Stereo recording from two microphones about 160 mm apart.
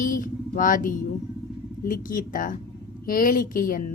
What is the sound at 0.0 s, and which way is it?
A woman's voice, 55° left (ahead or behind).